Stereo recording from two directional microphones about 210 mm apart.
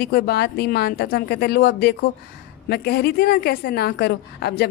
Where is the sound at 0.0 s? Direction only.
50° left (ahead or behind).